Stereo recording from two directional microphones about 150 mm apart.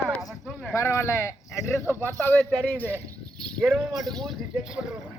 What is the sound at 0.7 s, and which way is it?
A man's voice, 20° left (ahead or behind).